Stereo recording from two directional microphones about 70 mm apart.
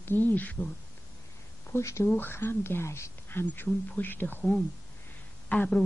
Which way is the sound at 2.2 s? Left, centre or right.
Left.